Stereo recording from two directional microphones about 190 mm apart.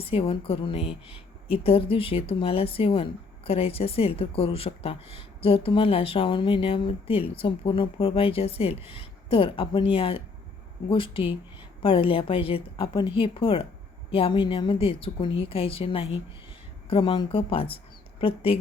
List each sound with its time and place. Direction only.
0.0 s speech: 30° left (ahead or behind)